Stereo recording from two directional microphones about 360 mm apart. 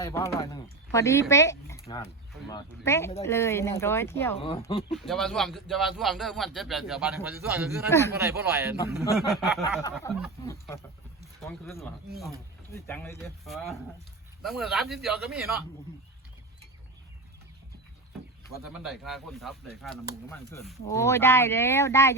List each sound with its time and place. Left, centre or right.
0.0 s speech: centre
4.9 s a man's voice: centre
7.9 s speech: centre
8.1 s a man's voice: centre
18.5 s speech: centre